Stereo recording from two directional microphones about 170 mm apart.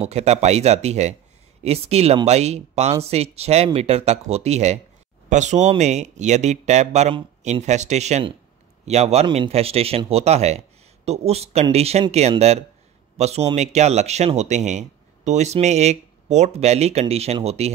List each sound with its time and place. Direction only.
0.0 s speech: 40° right (ahead or behind)